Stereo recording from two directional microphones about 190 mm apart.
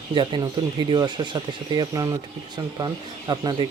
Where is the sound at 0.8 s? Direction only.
25° right (ahead or behind).